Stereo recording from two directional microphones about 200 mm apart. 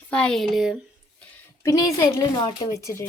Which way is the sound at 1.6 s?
20° left (ahead or behind).